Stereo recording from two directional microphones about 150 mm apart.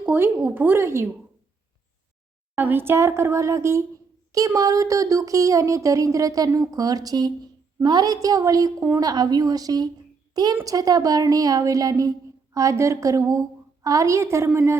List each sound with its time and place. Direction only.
0.0 s speech: 10° right (ahead or behind)
2.6 s speech: 15° right (ahead or behind)